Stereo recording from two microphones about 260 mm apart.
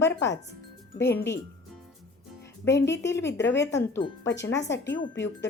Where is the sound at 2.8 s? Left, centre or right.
Left.